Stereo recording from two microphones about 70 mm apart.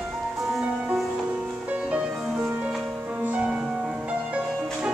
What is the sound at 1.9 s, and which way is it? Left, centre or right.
Music, centre.